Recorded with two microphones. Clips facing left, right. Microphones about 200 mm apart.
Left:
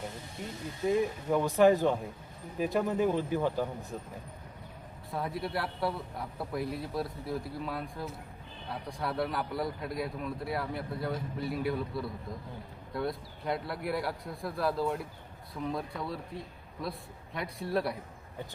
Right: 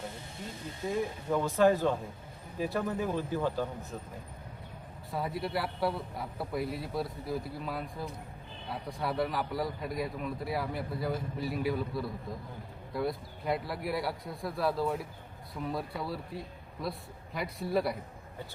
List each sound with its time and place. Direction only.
0.9 s speech: 15° left (ahead or behind)
5.1 s a man's voice: centre (ahead or behind)